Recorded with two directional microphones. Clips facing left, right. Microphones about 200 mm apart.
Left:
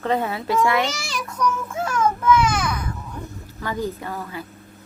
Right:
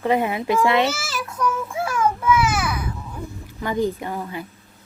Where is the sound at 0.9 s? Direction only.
Centre (ahead or behind).